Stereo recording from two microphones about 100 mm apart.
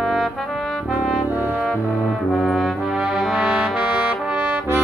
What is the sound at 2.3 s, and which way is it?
Trombone, centre (ahead or behind).